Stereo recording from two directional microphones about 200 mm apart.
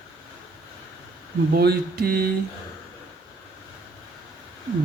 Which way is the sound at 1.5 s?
50° right (ahead or behind).